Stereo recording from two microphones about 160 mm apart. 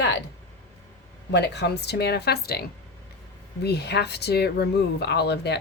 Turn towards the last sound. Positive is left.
turn(degrees=90)